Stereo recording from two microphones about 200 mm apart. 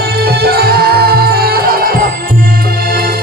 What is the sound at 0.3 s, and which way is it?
Music, 50° right (ahead or behind).